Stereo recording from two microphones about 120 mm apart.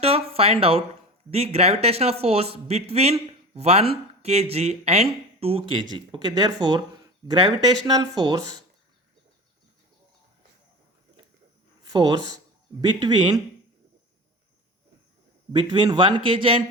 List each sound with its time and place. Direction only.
0.0 s speech: 55° right (ahead or behind)
5.9 s speech: 35° right (ahead or behind)
11.9 s speech: 35° right (ahead or behind)
15.5 s speech: 40° right (ahead or behind)